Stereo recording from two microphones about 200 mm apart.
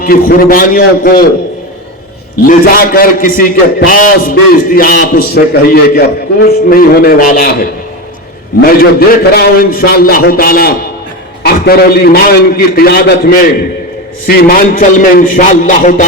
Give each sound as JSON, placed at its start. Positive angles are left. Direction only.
{"t": 0.0, "sound": "a man's voice", "side_deg": 45}
{"t": 2.5, "sound": "a man's voice", "side_deg": 45}